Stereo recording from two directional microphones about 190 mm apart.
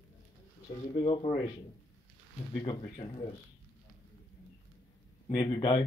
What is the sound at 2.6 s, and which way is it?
Speech, 20° left (ahead or behind).